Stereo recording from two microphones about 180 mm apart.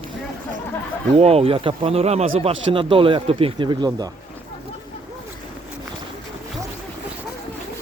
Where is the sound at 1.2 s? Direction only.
35° right (ahead or behind).